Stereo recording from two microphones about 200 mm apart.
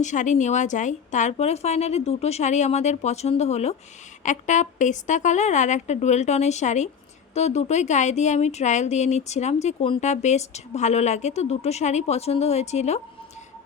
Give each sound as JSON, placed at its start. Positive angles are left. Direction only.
{"t": 0.0, "sound": "speech", "side_deg": 35}